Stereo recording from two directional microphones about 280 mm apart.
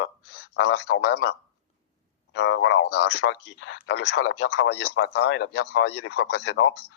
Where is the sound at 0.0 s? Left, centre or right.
Left.